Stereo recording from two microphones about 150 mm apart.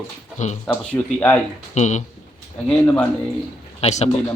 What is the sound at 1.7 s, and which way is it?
Speech, 50° left (ahead or behind).